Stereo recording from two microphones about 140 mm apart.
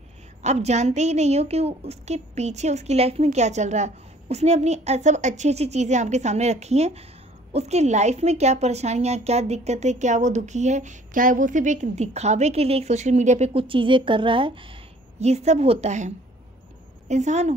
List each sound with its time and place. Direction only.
0.4 s a woman's voice: 55° right (ahead or behind)
13.5 s a woman's voice: 40° right (ahead or behind)
17.1 s a woman's voice: 55° right (ahead or behind)